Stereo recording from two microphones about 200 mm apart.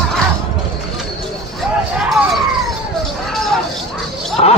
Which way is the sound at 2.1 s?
Centre (ahead or behind).